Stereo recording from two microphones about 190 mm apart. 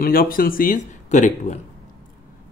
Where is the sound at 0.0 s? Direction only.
50° left (ahead or behind).